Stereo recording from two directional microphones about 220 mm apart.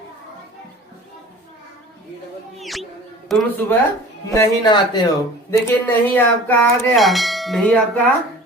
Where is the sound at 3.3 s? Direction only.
Centre (ahead or behind).